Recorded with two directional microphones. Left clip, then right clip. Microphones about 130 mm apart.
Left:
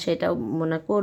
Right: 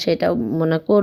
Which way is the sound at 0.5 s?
35° right (ahead or behind).